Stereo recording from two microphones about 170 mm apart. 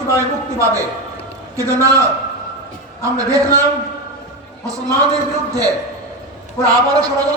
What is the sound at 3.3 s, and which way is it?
Speech, 20° right (ahead or behind).